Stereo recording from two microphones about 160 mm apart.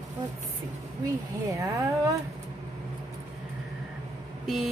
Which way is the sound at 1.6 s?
20° right (ahead or behind).